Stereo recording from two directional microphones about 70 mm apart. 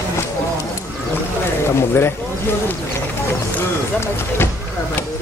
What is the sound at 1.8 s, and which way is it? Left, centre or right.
Speech, left.